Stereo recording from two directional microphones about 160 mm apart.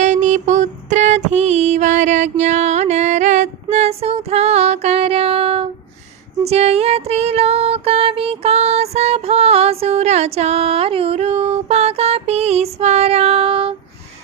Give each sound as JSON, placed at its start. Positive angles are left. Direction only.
{"t": 0.0, "sound": "music", "side_deg": -45}